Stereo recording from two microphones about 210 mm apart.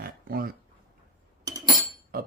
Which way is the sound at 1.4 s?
15° right (ahead or behind).